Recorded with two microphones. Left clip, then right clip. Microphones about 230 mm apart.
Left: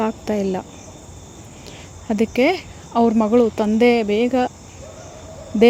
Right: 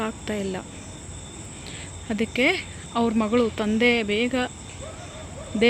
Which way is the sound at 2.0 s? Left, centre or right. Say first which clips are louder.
Left 5 dB; left.